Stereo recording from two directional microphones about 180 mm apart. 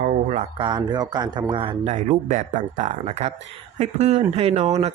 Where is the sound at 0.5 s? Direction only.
25° right (ahead or behind).